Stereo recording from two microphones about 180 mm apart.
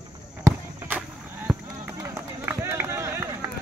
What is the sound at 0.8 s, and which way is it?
Run, 10° right (ahead or behind).